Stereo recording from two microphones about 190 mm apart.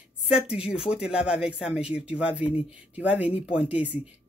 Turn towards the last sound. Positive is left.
turn(degrees=-5)  # may be behind; listen again after turning